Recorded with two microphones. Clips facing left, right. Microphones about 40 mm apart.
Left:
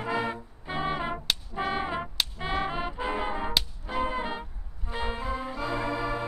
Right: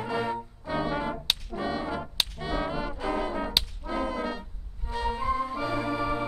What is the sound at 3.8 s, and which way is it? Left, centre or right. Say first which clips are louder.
Music: even; left.